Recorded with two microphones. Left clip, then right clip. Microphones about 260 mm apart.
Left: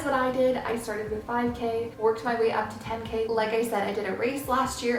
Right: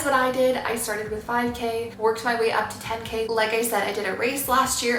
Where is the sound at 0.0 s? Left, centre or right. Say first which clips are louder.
Right 4 dB; centre.